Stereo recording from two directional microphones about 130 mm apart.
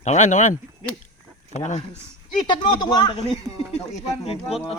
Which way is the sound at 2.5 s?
35° left (ahead or behind).